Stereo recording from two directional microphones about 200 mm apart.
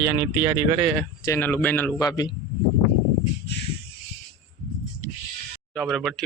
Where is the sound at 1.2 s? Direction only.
15° left (ahead or behind).